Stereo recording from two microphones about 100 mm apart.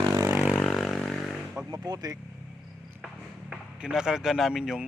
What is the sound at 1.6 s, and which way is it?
Vehicle, 40° right (ahead or behind).